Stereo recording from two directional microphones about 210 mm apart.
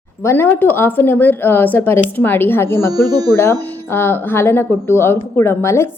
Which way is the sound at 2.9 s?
15° right (ahead or behind).